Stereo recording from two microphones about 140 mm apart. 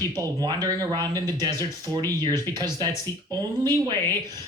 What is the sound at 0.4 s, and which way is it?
Speech, 30° right (ahead or behind).